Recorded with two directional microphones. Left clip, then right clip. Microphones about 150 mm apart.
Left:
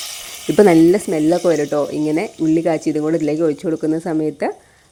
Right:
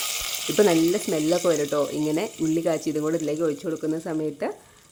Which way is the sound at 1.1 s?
30° left (ahead or behind).